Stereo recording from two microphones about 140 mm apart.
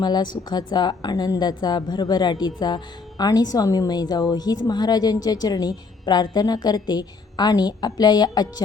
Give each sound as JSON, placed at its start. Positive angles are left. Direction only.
{"t": 0.0, "sound": "a woman's voice", "side_deg": 30}